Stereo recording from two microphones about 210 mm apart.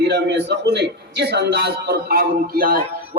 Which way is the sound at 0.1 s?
55° right (ahead or behind).